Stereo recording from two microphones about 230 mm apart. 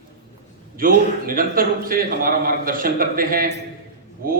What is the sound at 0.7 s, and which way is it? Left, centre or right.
A man's voice, right.